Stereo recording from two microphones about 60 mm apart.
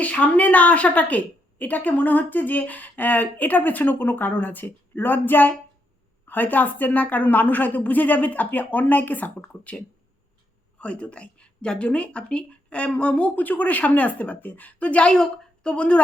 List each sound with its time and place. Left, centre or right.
0.0 s a woman's voice: left
10.8 s a woman's voice: centre